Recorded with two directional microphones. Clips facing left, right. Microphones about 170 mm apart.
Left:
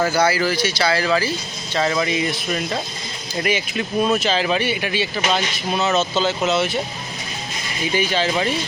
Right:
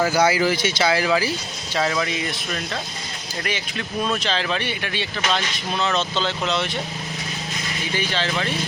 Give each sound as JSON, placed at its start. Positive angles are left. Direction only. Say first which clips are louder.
{"t": 0.0, "sound": "speech", "louder": "even", "side_deg": -15}
{"t": 1.9, "sound": "speech", "louder": "left 4 dB", "side_deg": 5}
{"t": 7.9, "sound": "speech", "louder": "left 5 dB", "side_deg": 10}